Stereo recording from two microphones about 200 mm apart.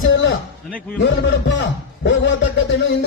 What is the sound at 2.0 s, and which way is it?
Speech, 65° left (ahead or behind).